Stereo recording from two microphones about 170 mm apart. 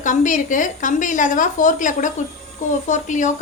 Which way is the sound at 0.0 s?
50° left (ahead or behind).